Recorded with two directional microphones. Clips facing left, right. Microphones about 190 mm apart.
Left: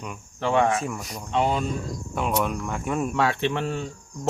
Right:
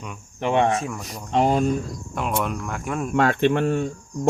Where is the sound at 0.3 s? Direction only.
20° right (ahead or behind).